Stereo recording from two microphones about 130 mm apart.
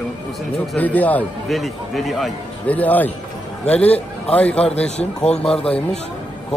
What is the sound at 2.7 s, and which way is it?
A man's voice, 10° left (ahead or behind).